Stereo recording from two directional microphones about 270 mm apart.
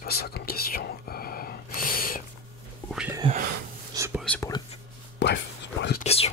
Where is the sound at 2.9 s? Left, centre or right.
Centre.